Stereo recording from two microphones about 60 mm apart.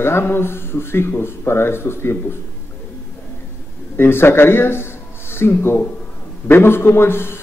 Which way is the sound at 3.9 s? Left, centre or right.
Left.